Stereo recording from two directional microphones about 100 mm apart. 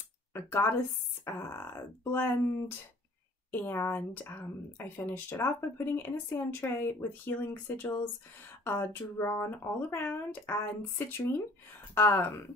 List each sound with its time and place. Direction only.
0.3 s speech: 25° left (ahead or behind)
3.6 s speech: 20° left (ahead or behind)